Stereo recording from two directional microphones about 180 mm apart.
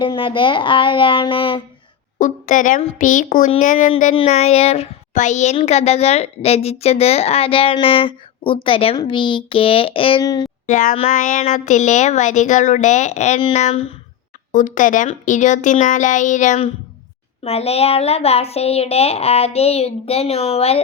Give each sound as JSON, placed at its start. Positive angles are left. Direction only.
{"t": 0.0, "sound": "speech", "side_deg": 30}
{"t": 2.1, "sound": "speech", "side_deg": 45}
{"t": 4.1, "sound": "a woman's voice", "side_deg": 35}
{"t": 10.7, "sound": "a woman's voice", "side_deg": 45}
{"t": 14.5, "sound": "a woman's voice", "side_deg": 45}